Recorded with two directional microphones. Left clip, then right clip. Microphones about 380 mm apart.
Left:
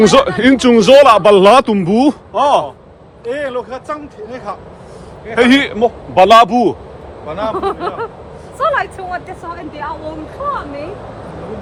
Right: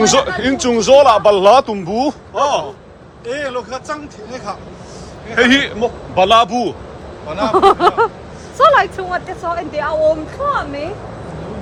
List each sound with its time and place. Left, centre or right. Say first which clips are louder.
0.0 s a man's voice: left 4 dB; centre
7.5 s speech: right 8 dB; centre